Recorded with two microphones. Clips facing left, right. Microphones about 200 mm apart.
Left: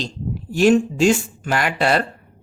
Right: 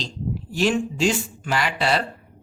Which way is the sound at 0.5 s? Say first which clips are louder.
Left 7 dB; 45° left (ahead or behind).